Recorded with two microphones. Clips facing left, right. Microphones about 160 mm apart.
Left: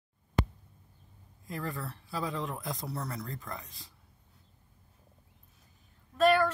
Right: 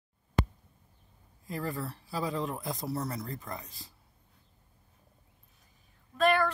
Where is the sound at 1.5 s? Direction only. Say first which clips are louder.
Right 2 dB; centre (ahead or behind).